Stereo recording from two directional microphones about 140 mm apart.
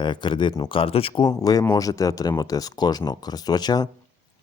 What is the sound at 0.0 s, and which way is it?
Speech, 35° left (ahead or behind).